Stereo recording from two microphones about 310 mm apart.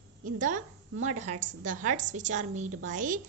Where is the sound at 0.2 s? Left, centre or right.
Right.